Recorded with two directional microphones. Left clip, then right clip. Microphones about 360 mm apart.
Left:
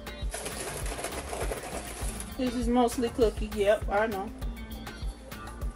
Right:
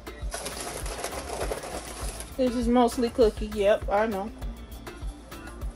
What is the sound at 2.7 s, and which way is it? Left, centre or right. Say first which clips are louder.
Speech: right 1 dB; right.